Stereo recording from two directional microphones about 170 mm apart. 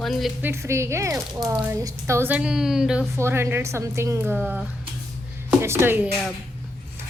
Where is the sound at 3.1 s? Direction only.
15° right (ahead or behind).